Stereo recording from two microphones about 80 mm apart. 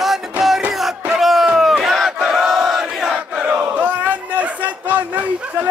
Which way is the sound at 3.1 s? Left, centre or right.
Centre.